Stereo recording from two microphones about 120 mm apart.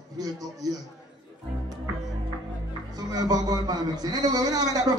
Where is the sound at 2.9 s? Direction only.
30° right (ahead or behind).